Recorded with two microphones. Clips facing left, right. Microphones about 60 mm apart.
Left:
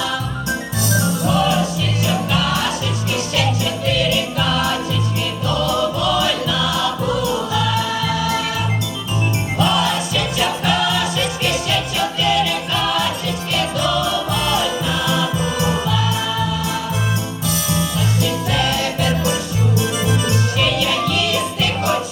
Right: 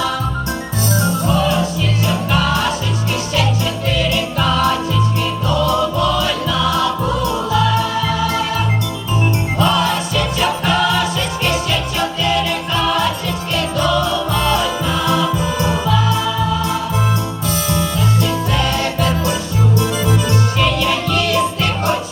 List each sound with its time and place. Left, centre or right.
1.0 s music: right
3.8 s jingle bell: right
5.6 s music: right
17.7 s music: right
20.6 s music: right